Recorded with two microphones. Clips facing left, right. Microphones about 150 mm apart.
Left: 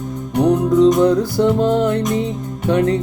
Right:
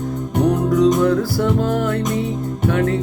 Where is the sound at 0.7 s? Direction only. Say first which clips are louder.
Left 3 dB; 20° left (ahead or behind).